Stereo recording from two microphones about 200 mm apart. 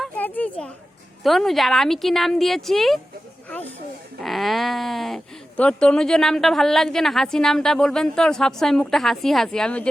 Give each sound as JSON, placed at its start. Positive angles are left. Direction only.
{"t": 0.0, "sound": "a sound", "side_deg": 10}
{"t": 1.2, "sound": "speech", "side_deg": 0}
{"t": 4.2, "sound": "speech", "side_deg": 0}